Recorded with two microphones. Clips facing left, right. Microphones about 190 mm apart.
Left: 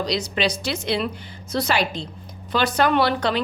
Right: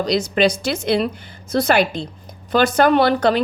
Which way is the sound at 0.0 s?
50° right (ahead or behind).